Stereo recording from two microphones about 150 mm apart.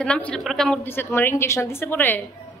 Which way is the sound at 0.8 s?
15° left (ahead or behind).